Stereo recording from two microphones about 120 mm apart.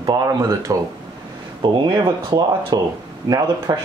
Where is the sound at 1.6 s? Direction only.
40° right (ahead or behind).